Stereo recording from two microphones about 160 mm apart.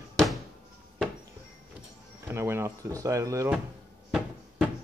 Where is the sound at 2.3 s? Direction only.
15° right (ahead or behind).